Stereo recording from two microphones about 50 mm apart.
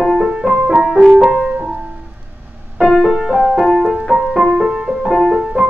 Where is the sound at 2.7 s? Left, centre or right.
Centre.